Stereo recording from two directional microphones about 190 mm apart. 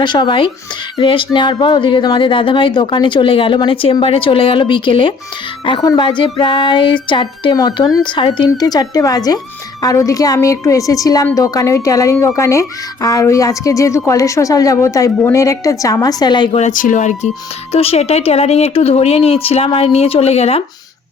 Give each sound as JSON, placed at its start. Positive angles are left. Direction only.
{"t": 0.0, "sound": "a woman's voice", "side_deg": 25}
{"t": 16.6, "sound": "speech", "side_deg": 40}